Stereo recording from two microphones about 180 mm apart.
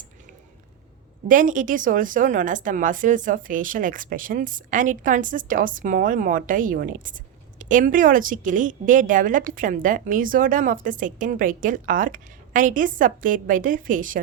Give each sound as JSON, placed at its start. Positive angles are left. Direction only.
{"t": 1.3, "sound": "a woman's voice", "side_deg": -45}